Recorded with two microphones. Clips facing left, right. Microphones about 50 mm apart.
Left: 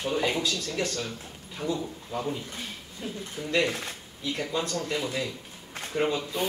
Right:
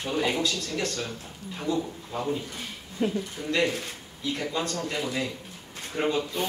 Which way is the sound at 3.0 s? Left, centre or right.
Right.